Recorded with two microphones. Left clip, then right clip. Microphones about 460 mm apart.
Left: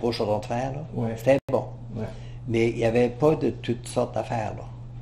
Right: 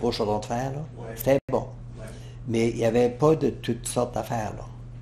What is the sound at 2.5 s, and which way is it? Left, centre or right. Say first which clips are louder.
Speech: even; right.